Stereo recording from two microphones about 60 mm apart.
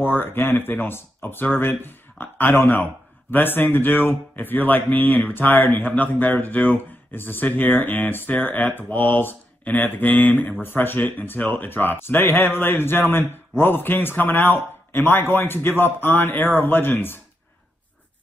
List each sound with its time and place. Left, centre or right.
0.2 s speech: left